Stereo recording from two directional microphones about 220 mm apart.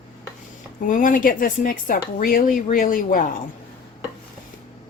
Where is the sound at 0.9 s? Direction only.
35° left (ahead or behind).